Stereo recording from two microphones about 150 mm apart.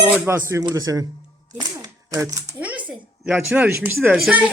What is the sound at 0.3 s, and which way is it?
Speech, 20° right (ahead or behind).